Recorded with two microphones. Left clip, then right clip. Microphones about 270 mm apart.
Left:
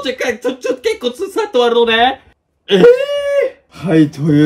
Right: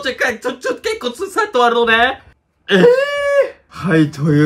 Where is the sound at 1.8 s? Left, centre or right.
Centre.